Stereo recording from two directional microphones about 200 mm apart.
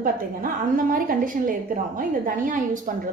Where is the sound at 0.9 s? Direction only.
45° right (ahead or behind).